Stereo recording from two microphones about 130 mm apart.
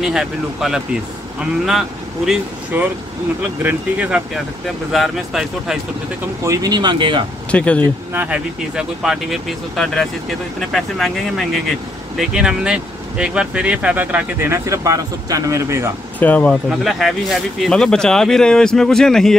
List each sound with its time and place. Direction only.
0.0 s speech: 5° right (ahead or behind)
2.7 s speech: 15° right (ahead or behind)
6.4 s speech: 25° right (ahead or behind)
7.5 s speech: 10° left (ahead or behind)
8.1 s speech: 10° right (ahead or behind)
16.2 s speech: 10° left (ahead or behind)
16.6 s speech: centre (ahead or behind)